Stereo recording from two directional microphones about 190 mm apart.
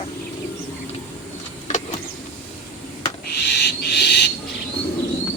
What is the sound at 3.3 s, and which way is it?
Owl, 60° left (ahead or behind).